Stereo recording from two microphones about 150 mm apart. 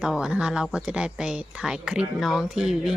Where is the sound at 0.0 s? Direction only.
5° right (ahead or behind).